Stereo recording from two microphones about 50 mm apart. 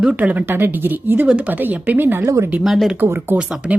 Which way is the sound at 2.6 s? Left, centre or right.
Centre.